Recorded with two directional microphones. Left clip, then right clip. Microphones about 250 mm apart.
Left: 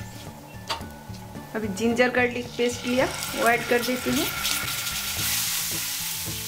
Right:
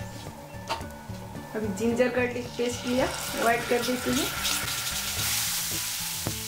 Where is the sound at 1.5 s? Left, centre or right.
Centre.